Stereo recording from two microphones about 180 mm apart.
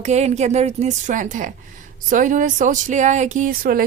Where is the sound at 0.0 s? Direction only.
40° right (ahead or behind).